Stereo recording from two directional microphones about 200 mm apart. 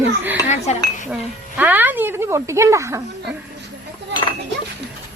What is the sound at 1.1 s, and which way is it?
A woman's voice, 10° right (ahead or behind).